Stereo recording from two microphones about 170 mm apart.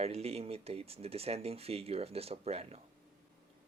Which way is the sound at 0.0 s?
40° right (ahead or behind).